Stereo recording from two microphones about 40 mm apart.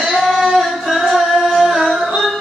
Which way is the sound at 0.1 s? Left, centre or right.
Centre.